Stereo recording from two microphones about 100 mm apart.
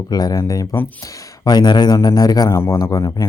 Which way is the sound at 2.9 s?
35° left (ahead or behind).